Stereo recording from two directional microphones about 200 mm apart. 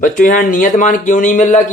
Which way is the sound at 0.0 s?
40° left (ahead or behind).